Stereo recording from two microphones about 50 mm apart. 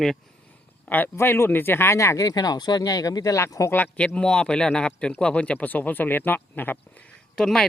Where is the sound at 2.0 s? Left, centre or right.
Left.